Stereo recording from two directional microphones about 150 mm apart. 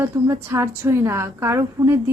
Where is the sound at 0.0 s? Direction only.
15° right (ahead or behind).